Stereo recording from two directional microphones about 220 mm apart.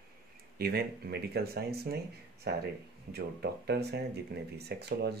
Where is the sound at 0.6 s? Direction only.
45° right (ahead or behind).